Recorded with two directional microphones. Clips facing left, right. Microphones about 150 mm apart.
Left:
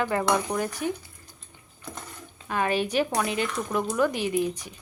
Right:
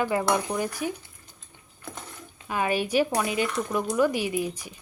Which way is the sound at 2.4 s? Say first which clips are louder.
Even; 10° right (ahead or behind).